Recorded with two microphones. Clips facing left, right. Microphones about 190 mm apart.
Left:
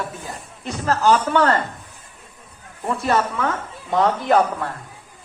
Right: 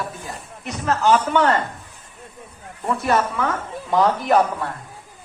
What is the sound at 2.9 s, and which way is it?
Speech, 30° left (ahead or behind).